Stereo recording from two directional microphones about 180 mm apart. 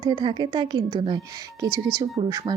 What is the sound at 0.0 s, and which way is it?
Speech, 25° right (ahead or behind).